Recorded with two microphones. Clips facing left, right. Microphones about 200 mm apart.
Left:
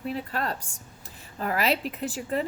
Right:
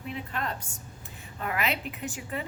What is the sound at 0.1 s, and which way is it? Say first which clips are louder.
A woman's voice: left 3 dB; 40° left (ahead or behind).